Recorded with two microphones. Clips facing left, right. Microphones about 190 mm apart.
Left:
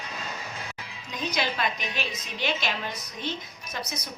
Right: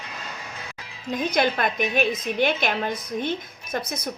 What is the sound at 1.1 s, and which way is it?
A woman's voice, 50° right (ahead or behind).